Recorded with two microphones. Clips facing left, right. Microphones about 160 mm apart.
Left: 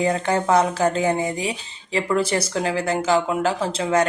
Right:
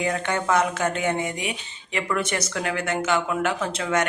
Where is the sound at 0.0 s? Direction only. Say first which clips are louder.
Left 4 dB; 30° left (ahead or behind).